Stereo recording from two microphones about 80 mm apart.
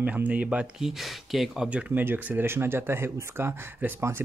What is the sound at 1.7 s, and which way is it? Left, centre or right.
Speech, centre.